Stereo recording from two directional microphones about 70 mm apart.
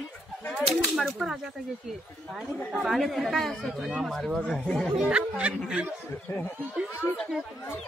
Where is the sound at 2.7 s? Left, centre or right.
Centre.